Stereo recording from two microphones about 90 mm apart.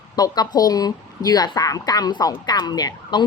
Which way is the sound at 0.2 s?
45° left (ahead or behind).